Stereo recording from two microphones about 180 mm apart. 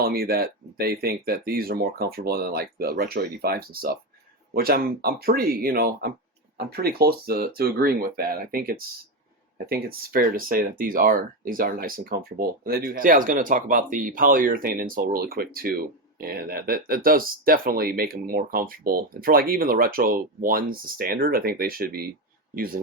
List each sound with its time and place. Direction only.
0.0 s speech: 55° right (ahead or behind)